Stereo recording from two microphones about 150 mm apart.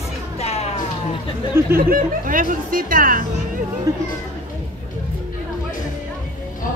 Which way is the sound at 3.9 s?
20° right (ahead or behind).